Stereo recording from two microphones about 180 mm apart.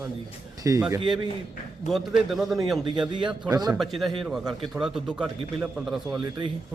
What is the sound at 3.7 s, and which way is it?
A man's voice, centre (ahead or behind).